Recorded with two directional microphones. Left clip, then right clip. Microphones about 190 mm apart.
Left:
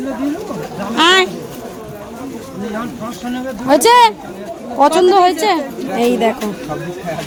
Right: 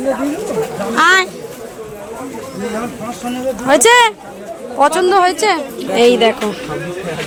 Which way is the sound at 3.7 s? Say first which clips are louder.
Even; centre (ahead or behind).